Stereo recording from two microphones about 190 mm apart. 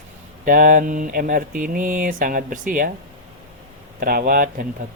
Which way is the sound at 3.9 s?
50° right (ahead or behind).